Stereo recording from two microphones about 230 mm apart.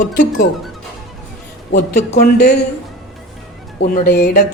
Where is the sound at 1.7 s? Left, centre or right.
Left.